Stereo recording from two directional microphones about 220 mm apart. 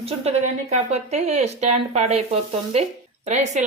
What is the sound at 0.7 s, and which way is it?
A woman's voice, 30° right (ahead or behind).